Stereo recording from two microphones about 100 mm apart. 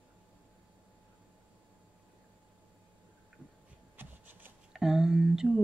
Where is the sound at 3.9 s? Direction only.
20° right (ahead or behind).